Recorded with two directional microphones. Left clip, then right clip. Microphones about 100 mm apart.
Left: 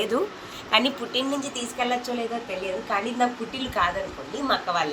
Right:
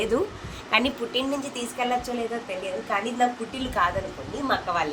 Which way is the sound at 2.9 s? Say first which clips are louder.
Even; 20° right (ahead or behind).